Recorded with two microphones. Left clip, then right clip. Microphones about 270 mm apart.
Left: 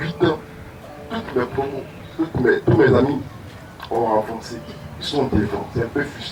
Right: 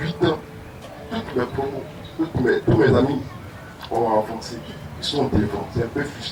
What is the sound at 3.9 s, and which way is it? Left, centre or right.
Speech, centre.